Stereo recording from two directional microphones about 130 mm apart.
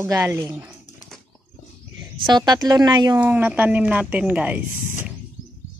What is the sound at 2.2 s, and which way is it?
Speech, 35° right (ahead or behind).